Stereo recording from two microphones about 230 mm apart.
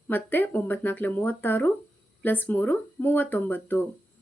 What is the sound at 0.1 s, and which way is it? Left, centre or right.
Speech, centre.